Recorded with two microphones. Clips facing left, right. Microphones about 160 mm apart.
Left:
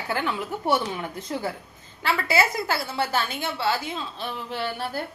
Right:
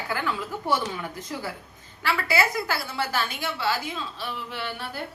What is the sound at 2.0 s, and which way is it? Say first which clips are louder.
A woman's voice: left 2 dB; 25° left (ahead or behind).